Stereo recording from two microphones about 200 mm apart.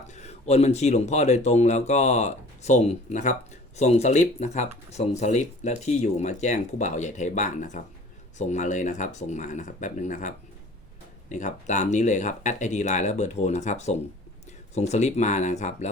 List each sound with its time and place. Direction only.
0.1 s speech: 35° left (ahead or behind)